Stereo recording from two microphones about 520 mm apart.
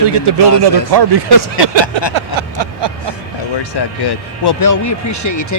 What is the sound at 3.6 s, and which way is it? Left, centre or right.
Speech, left.